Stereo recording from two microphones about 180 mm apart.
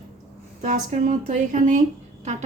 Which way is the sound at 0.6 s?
45° right (ahead or behind).